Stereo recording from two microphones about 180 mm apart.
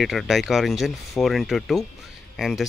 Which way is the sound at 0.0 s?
Centre (ahead or behind).